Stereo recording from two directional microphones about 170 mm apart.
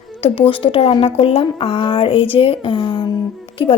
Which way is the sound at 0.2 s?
30° left (ahead or behind).